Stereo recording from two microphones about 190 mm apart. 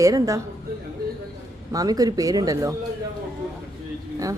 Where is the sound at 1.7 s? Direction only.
20° right (ahead or behind).